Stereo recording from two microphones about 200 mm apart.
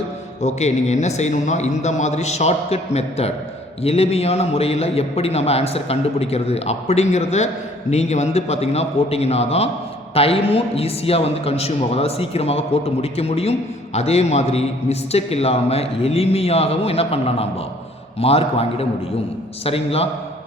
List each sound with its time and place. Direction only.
0.4 s a man's voice: 35° left (ahead or behind)